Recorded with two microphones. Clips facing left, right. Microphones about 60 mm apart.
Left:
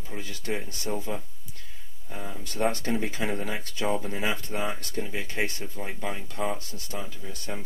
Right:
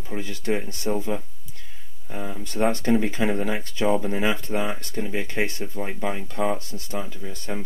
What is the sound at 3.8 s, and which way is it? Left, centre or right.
Speech, right.